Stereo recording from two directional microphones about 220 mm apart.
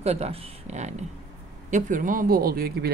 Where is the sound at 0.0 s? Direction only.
30° right (ahead or behind).